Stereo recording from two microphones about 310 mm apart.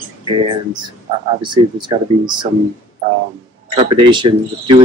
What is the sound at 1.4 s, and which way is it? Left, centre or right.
Speech, centre.